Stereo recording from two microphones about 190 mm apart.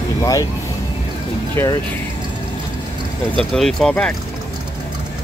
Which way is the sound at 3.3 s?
Centre (ahead or behind).